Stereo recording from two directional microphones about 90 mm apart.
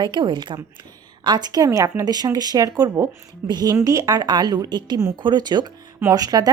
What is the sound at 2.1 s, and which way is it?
Speech, 50° right (ahead or behind).